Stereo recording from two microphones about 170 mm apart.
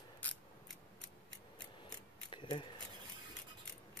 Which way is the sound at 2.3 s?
30° left (ahead or behind).